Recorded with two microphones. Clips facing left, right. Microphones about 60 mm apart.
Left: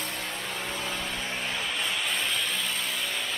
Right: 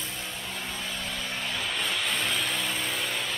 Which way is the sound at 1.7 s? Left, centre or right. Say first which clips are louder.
Right 2 dB; centre.